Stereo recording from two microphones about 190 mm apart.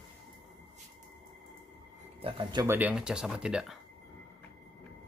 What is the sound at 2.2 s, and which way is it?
Speech, 25° right (ahead or behind).